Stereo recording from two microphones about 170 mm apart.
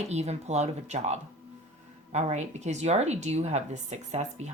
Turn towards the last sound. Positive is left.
turn(degrees=-40)  # may be behind; listen again after turning